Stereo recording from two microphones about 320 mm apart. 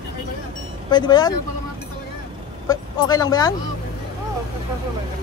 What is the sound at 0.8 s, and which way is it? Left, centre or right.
Speech, centre.